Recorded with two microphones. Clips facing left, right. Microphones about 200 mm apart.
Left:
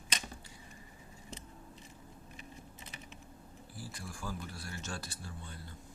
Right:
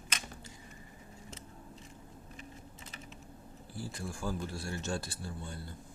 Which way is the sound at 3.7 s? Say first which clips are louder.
Right 6 dB; 25° right (ahead or behind).